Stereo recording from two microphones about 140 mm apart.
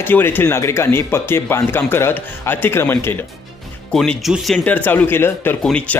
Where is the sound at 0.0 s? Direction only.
15° left (ahead or behind).